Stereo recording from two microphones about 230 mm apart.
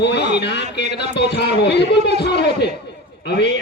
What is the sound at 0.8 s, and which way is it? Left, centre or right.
A man's voice, left.